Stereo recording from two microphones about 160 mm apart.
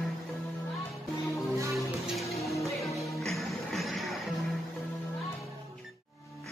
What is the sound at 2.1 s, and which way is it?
Music, centre (ahead or behind).